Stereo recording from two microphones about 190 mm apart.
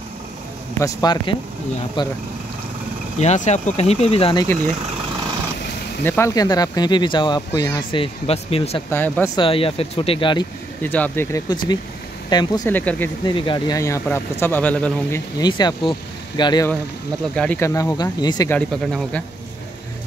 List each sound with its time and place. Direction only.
0.7 s speech: 20° left (ahead or behind)
3.2 s speech: 35° left (ahead or behind)
6.0 s speech: 15° left (ahead or behind)
8.0 s speech: 30° left (ahead or behind)
8.9 s speech: 10° left (ahead or behind)
9.3 s speech: 25° left (ahead or behind)
10.8 s speech: 10° left (ahead or behind)
12.6 s speech: 10° left (ahead or behind)
13.2 s speech: 25° left (ahead or behind)
17.4 s speech: 10° left (ahead or behind)
18.5 s speech: 5° left (ahead or behind)